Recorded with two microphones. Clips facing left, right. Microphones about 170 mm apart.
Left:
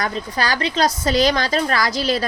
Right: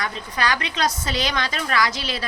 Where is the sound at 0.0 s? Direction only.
35° left (ahead or behind).